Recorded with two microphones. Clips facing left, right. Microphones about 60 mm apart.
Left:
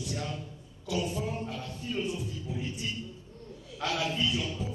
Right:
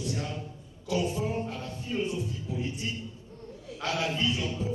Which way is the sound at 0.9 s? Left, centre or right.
Right.